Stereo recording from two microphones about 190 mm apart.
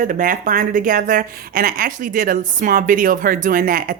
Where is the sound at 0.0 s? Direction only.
45° right (ahead or behind).